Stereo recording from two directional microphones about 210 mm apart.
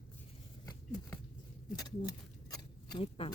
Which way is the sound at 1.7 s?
15° left (ahead or behind).